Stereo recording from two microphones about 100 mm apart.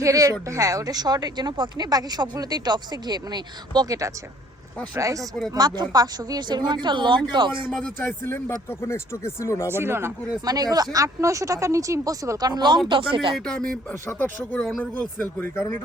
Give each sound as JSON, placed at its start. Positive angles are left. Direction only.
{"t": 0.0, "sound": "speech", "side_deg": -35}
{"t": 5.5, "sound": "speech", "side_deg": -45}
{"t": 7.7, "sound": "speech", "side_deg": 15}
{"t": 9.6, "sound": "speech", "side_deg": -25}
{"t": 10.4, "sound": "speech", "side_deg": -40}
{"t": 12.9, "sound": "speech", "side_deg": -55}
{"t": 13.3, "sound": "speech", "side_deg": 5}
{"t": 14.2, "sound": "speech", "side_deg": 20}